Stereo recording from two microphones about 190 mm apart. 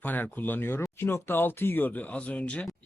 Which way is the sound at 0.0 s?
10° left (ahead or behind).